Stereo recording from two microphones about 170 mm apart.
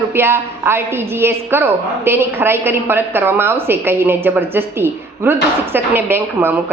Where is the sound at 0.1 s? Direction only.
15° right (ahead or behind).